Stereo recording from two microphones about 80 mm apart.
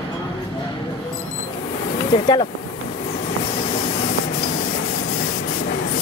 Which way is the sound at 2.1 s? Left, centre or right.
Left.